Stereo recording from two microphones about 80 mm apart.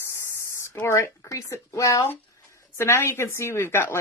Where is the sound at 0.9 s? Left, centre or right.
Left.